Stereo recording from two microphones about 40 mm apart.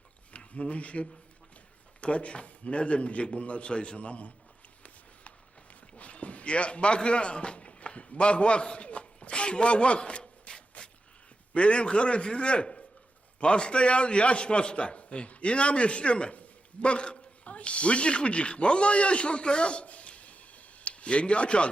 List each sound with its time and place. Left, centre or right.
0.3 s a man's voice: left
6.0 s a sound: left
11.5 s a man's voice: left